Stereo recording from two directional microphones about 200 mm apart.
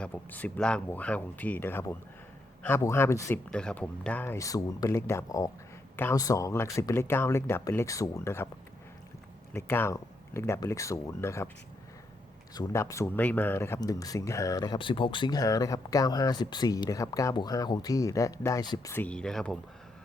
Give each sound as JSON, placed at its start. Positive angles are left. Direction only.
{"t": 0.0, "sound": "speech", "side_deg": 10}
{"t": 9.5, "sound": "speech", "side_deg": 10}
{"t": 12.5, "sound": "speech", "side_deg": 15}